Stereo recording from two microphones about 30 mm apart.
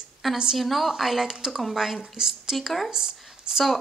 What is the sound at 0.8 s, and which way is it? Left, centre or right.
Speech, centre.